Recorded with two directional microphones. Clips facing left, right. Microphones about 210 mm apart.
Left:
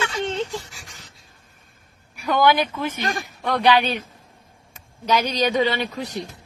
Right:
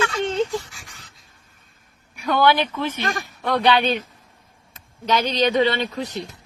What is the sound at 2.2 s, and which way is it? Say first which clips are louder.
Speech: even; 10° left (ahead or behind).